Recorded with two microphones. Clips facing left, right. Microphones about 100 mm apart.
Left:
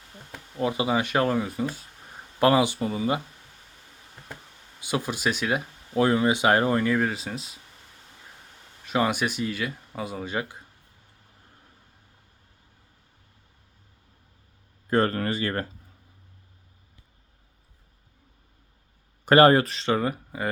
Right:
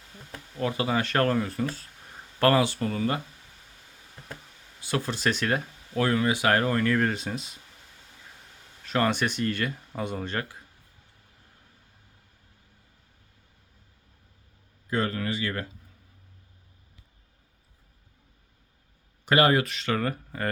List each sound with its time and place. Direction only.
0.5 s speech: 20° left (ahead or behind)
4.8 s speech: 15° left (ahead or behind)
5.9 s speech: 20° left (ahead or behind); by 7.6 s centre (ahead or behind)
8.8 s speech: 10° left (ahead or behind)
14.8 s speech: 45° left (ahead or behind)
19.2 s speech: 40° left (ahead or behind); by 20.5 s 15° left (ahead or behind)